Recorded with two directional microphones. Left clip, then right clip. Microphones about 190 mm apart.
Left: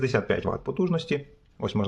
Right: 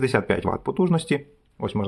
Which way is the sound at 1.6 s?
5° right (ahead or behind).